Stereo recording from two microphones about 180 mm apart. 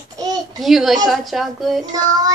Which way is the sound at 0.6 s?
Centre (ahead or behind).